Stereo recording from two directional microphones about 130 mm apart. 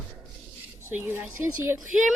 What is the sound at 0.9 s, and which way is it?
Speech, 15° right (ahead or behind).